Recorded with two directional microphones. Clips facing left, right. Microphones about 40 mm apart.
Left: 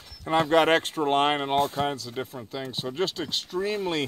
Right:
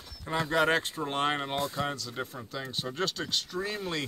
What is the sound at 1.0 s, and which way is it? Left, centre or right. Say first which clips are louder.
Speech: left 7 dB; left.